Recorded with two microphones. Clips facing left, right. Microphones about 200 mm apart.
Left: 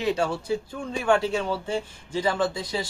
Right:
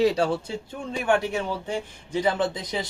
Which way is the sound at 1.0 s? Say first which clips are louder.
Left 1 dB; 15° right (ahead or behind).